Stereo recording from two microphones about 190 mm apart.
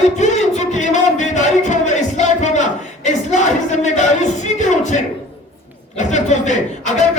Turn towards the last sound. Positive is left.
turn(degrees=40)  # may be behind; listen again after turning